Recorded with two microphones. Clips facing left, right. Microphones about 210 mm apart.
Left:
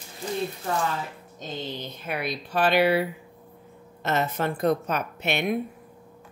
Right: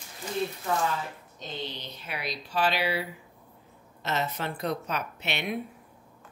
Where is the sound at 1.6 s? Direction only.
50° left (ahead or behind).